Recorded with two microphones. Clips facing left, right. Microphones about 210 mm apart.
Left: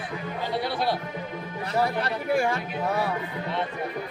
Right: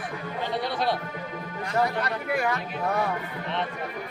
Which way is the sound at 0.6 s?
5° left (ahead or behind).